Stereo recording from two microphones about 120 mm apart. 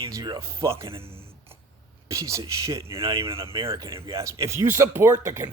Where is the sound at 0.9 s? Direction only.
50° right (ahead or behind).